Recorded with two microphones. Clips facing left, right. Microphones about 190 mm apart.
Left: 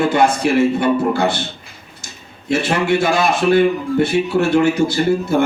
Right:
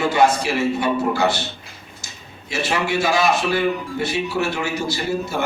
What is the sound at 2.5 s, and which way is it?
Speech, 55° left (ahead or behind).